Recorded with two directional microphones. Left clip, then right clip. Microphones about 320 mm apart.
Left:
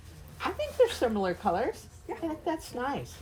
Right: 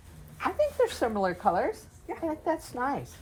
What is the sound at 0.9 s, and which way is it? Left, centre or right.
Speech, centre.